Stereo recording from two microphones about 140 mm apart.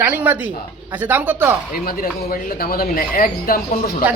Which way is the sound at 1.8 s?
90° left.